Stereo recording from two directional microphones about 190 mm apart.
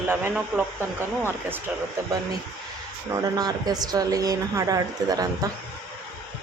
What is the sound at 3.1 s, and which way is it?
A woman's voice, 20° right (ahead or behind).